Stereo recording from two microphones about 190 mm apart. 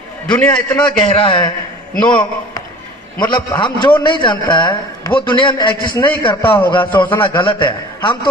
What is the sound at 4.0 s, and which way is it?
A man's voice, 25° left (ahead or behind).